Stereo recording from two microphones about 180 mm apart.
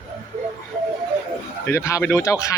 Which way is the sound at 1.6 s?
15° left (ahead or behind).